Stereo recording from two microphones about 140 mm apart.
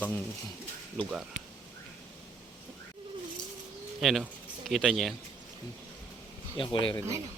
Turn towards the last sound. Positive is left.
turn(degrees=40)  # may be behind; listen again after turning